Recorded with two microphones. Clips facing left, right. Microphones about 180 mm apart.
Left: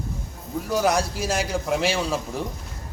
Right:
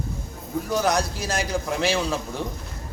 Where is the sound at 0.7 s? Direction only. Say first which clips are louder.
Left 1 dB; 5° left (ahead or behind).